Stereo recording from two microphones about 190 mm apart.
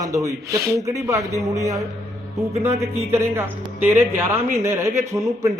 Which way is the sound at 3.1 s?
10° right (ahead or behind).